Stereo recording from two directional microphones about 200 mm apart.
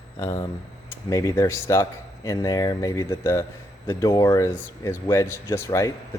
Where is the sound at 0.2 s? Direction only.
15° left (ahead or behind).